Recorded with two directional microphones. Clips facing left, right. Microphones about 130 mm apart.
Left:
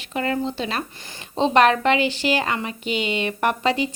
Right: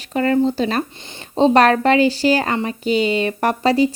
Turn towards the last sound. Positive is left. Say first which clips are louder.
# right 5 dB
turn(degrees=-35)  # may be behind; listen again after turning